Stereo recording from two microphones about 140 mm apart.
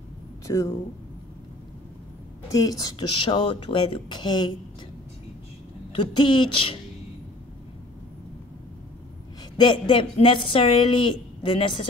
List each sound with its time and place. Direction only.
0.5 s speech: 20° left (ahead or behind)
2.5 s a woman's voice: 30° left (ahead or behind)
5.9 s a woman's voice: 35° left (ahead or behind)
9.6 s a woman's voice: 35° left (ahead or behind)